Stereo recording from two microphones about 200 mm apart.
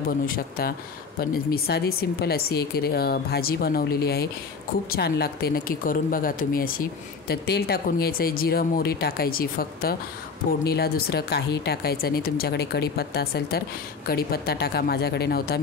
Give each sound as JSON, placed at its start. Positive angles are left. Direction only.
{"t": 0.3, "sound": "speech", "side_deg": 50}